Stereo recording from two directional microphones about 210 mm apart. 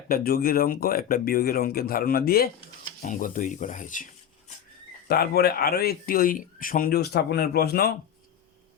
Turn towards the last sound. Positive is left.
turn(degrees=45)  # may be behind; listen again after turning